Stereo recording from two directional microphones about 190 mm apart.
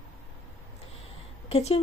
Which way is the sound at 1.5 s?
30° left (ahead or behind).